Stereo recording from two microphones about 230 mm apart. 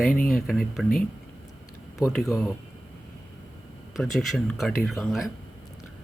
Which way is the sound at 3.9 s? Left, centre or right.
Centre.